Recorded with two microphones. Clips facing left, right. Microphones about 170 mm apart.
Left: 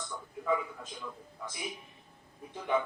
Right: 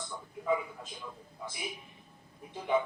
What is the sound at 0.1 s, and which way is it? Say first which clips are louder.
A man's voice: even; 20° right (ahead or behind).